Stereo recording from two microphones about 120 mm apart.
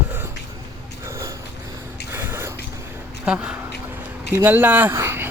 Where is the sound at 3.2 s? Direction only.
10° right (ahead or behind).